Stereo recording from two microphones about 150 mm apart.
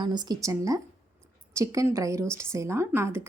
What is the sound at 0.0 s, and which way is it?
Speech, 30° right (ahead or behind).